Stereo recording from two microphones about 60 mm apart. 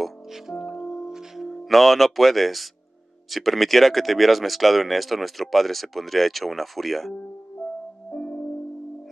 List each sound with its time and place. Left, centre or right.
0.0 s music: centre
3.3 s speech: centre
8.1 s music: left